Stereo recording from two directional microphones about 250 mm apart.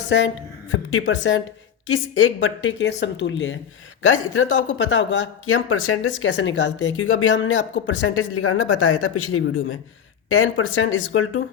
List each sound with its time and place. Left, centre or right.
0.1 s speech: left